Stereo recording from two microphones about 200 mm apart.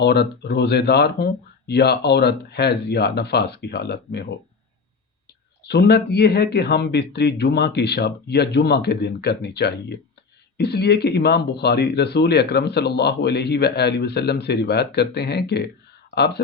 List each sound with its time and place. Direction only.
0.0 s speech: 55° left (ahead or behind)
5.6 s speech: 55° left (ahead or behind)